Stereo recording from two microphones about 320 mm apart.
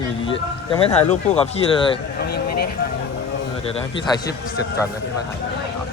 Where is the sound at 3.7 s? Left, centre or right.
Centre.